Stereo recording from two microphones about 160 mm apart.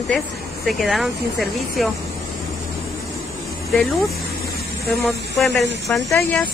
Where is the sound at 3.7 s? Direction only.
Centre (ahead or behind).